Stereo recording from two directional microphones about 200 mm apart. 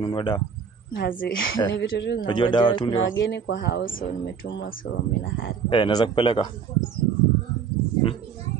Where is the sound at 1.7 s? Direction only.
60° left (ahead or behind).